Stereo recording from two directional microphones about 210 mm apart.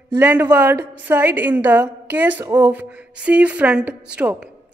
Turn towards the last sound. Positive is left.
turn(degrees=-5)  # may be behind; listen again after turning